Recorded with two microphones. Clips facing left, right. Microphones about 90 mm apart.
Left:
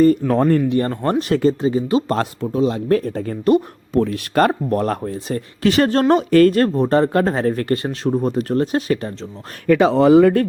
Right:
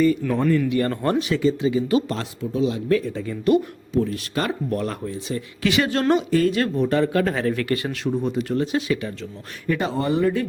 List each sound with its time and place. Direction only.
0.0 s speech: 45° left (ahead or behind)
0.3 s speech: 60° left (ahead or behind)
0.7 s speech: 30° left (ahead or behind)
1.3 s speech: 45° left (ahead or behind)
4.0 s speech: 60° left (ahead or behind); by 9.1 s 45° left (ahead or behind)
9.6 s speech: 85° left